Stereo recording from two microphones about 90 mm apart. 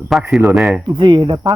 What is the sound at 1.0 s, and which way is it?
Speech, 60° right (ahead or behind).